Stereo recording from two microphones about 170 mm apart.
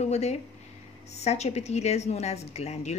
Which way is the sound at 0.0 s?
40° left (ahead or behind).